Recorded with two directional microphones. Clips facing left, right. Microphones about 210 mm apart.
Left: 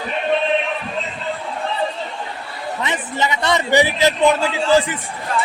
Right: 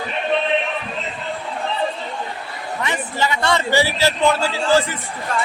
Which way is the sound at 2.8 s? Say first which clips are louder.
Even; 20° left (ahead or behind).